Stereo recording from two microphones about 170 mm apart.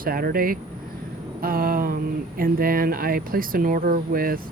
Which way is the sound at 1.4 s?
55° right (ahead or behind).